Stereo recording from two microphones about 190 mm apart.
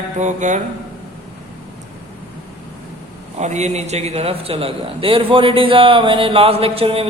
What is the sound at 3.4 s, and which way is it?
A man's voice, 35° right (ahead or behind).